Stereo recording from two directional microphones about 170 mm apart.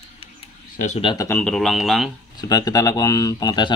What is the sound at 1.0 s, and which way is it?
Speech, 30° left (ahead or behind).